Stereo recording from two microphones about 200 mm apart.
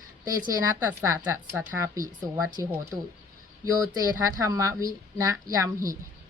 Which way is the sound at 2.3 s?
10° right (ahead or behind).